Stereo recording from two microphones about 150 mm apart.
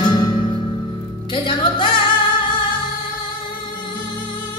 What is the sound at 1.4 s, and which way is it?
Music, 30° left (ahead or behind).